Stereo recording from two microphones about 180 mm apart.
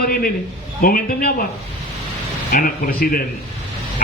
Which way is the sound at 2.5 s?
55° left (ahead or behind).